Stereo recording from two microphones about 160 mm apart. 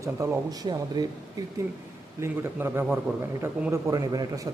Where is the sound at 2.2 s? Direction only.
15° right (ahead or behind).